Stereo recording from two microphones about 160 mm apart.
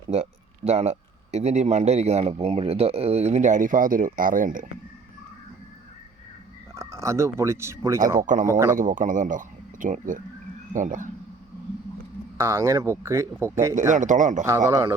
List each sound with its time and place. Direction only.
0.1 s speech: 45° right (ahead or behind)
6.7 s speech: 20° right (ahead or behind)
8.2 s speech: 55° right (ahead or behind)
8.4 s speech: 20° right (ahead or behind)
8.7 s speech: 55° right (ahead or behind)
12.4 s speech: 15° right (ahead or behind)
13.9 s speech: 50° right (ahead or behind)
14.7 s speech: 20° right (ahead or behind)